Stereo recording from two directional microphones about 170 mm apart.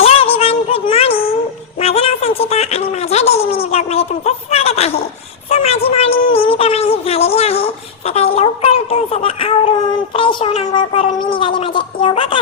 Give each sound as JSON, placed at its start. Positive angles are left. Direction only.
{"t": 0.0, "sound": "child singing", "side_deg": 35}
{"t": 1.8, "sound": "a sound", "side_deg": 35}
{"t": 10.2, "sound": "a woman's voice", "side_deg": 35}